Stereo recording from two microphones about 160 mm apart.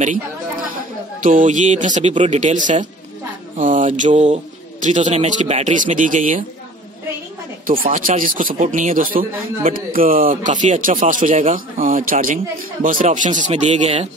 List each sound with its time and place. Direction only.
1.2 s speech: 55° right (ahead or behind)
7.6 s speech: 60° right (ahead or behind); by 14.0 s 40° right (ahead or behind)